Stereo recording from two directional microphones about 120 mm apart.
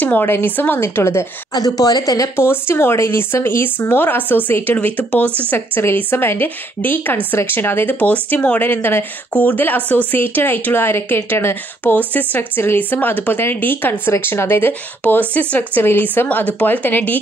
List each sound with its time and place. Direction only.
0.0 s speech: 15° left (ahead or behind)